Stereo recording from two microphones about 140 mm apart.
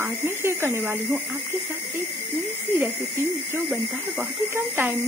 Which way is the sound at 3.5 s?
15° right (ahead or behind).